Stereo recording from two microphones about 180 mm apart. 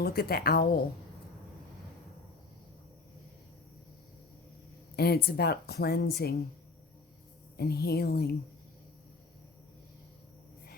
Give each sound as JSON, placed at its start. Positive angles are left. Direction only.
{"t": 0.0, "sound": "speech", "side_deg": 60}
{"t": 4.9, "sound": "speech", "side_deg": 60}
{"t": 7.5, "sound": "speech", "side_deg": 60}